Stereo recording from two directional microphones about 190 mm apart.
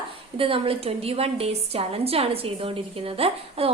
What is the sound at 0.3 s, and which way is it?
A woman's voice, 30° right (ahead or behind).